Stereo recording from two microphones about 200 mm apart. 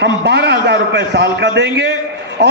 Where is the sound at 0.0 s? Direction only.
60° right (ahead or behind).